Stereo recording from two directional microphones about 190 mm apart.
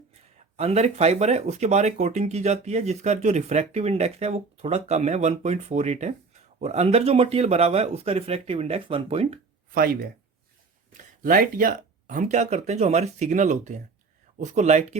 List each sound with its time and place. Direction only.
0.5 s speech: 35° right (ahead or behind)
9.7 s speech: 55° right (ahead or behind)